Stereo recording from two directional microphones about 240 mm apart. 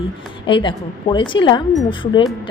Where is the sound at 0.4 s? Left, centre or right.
Left.